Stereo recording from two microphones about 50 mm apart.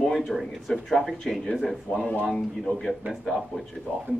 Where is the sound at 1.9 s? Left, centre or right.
Left.